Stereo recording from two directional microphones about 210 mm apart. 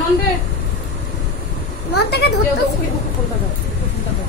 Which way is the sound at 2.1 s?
50° left (ahead or behind).